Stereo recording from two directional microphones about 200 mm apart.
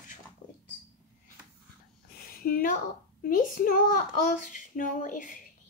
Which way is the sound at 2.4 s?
45° left (ahead or behind).